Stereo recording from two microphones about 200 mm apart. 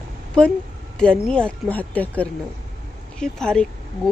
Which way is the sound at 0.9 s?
5° left (ahead or behind).